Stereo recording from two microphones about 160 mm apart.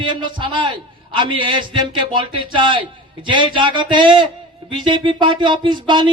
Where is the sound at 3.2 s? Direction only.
30° right (ahead or behind).